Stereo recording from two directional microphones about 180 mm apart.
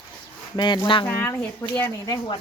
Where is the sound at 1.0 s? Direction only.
15° left (ahead or behind).